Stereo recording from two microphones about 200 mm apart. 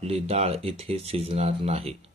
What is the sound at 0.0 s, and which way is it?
A man's voice, 30° right (ahead or behind).